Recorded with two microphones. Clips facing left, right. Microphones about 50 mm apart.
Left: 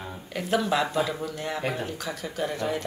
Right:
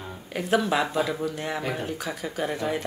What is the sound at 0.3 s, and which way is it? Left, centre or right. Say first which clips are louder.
Speech: right 2 dB; centre.